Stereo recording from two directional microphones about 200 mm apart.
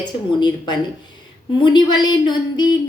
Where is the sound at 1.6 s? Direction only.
20° left (ahead or behind).